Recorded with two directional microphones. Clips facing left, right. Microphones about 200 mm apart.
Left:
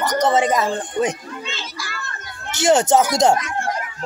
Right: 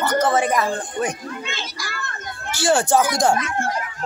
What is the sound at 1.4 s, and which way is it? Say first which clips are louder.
Children playing: even; 45° right (ahead or behind).